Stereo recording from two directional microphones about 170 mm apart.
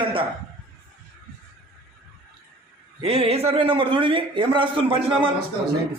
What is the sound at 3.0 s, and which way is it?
A man's voice, 35° right (ahead or behind).